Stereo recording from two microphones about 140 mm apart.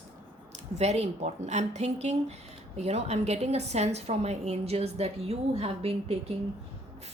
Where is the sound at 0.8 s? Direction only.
50° right (ahead or behind).